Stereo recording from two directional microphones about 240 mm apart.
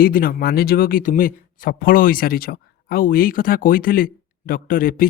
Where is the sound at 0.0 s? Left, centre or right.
Left.